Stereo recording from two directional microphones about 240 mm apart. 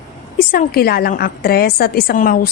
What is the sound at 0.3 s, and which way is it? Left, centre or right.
A woman's voice, left.